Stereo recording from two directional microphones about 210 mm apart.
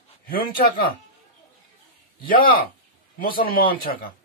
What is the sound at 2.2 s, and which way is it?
Speech, 45° left (ahead or behind).